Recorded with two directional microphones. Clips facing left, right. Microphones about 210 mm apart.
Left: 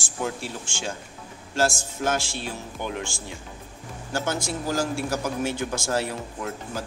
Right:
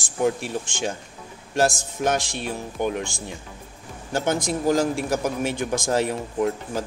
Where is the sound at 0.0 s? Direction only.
15° right (ahead or behind).